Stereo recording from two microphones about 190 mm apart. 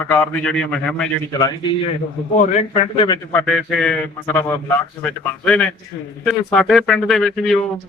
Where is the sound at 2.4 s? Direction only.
40° left (ahead or behind).